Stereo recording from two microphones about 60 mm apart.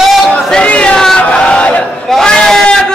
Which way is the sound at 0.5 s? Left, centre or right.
Centre.